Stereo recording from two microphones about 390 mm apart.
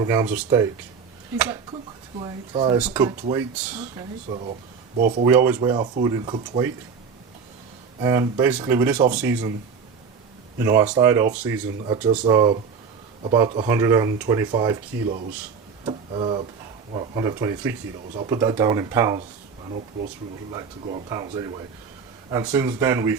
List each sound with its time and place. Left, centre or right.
0.0 s speech: centre
2.1 s speech: centre
5.2 s speech: centre
8.0 s speech: centre
10.6 s speech: centre
20.5 s speech: centre